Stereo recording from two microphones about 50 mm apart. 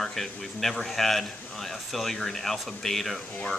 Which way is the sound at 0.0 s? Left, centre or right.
Centre.